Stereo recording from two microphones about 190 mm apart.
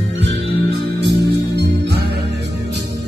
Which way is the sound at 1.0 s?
60° right (ahead or behind).